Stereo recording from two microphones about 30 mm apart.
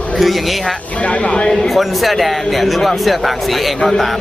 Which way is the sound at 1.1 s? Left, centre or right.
Left.